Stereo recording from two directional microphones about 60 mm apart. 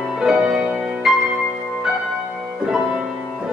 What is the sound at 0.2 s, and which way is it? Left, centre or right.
Music, centre.